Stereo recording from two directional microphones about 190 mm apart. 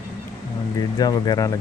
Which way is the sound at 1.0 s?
20° left (ahead or behind).